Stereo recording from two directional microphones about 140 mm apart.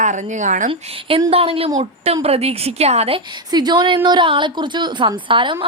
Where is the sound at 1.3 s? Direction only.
45° right (ahead or behind).